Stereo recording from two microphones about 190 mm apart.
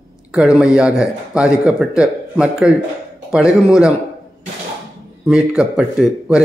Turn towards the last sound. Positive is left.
turn(degrees=-5)  # may be behind; listen again after turning